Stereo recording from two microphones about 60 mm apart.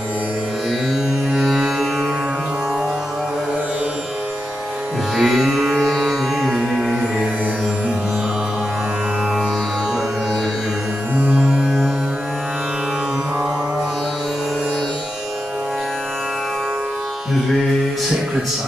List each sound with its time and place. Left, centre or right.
1.3 s music: centre
5.1 s music: centre